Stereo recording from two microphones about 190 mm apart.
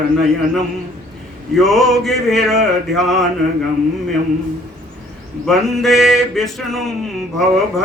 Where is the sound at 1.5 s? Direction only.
Centre (ahead or behind).